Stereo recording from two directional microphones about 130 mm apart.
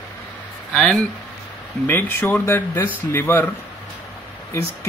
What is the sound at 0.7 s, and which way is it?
Speech, 5° left (ahead or behind).